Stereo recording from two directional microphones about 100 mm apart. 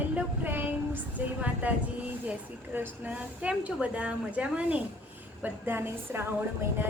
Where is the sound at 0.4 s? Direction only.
20° right (ahead or behind).